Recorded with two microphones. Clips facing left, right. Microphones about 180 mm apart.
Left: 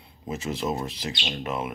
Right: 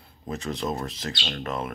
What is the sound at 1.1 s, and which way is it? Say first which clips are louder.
Speech: left 1 dB; 15° left (ahead or behind).